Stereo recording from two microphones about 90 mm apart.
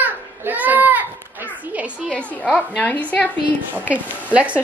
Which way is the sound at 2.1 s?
5° left (ahead or behind).